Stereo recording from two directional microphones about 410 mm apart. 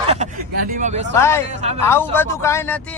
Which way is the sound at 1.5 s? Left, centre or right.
Centre.